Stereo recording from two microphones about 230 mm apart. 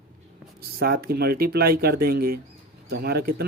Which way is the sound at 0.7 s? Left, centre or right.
Right.